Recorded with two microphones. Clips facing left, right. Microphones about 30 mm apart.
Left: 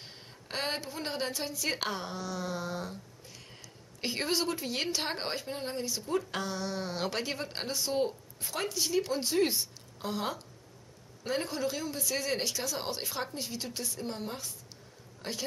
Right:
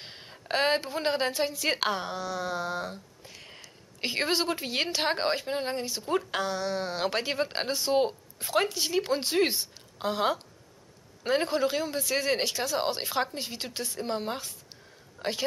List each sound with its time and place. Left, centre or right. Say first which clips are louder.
0.0 s a woman's voice: right 4 dB; right